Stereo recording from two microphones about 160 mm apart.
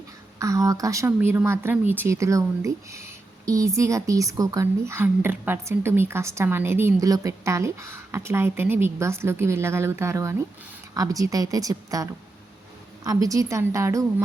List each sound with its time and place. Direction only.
0.3 s a woman's voice: 20° right (ahead or behind)
13.1 s a woman's voice: 20° right (ahead or behind)